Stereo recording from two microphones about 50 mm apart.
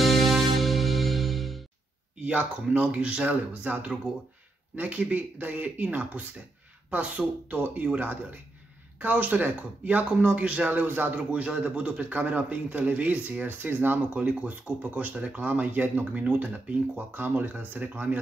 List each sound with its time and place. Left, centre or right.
0.0 s music: centre
2.2 s a man's voice: right
10.9 s speech: right
11.1 s a man's voice: right
13.5 s speech: right